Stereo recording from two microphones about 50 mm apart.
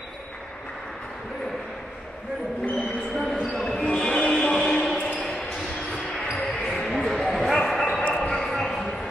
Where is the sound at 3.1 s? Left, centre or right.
Centre.